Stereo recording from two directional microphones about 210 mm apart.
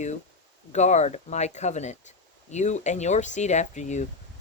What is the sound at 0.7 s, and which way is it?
Speech, 35° left (ahead or behind).